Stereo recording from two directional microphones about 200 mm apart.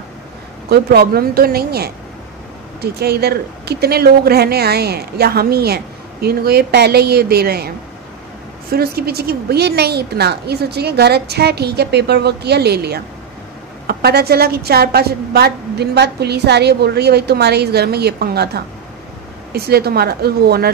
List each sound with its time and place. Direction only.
0.7 s a woman's voice: 50° right (ahead or behind)
8.7 s a woman's voice: 50° right (ahead or behind)